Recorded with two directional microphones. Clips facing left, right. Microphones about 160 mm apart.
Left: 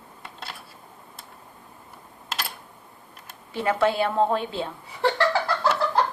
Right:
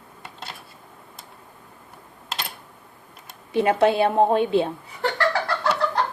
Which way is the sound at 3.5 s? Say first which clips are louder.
Right 4 dB; 20° right (ahead or behind).